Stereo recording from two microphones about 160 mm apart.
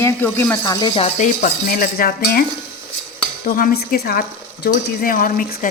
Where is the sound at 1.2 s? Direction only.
50° left (ahead or behind); by 2.4 s 70° left (ahead or behind).